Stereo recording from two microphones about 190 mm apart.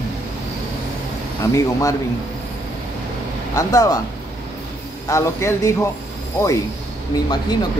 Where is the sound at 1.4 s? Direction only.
15° left (ahead or behind).